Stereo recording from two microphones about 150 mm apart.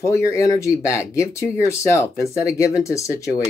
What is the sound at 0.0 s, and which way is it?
Speech, 20° left (ahead or behind).